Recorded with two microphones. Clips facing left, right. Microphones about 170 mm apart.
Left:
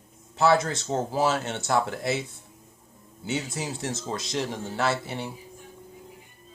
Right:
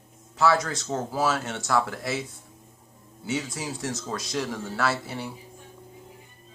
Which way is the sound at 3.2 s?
25° left (ahead or behind).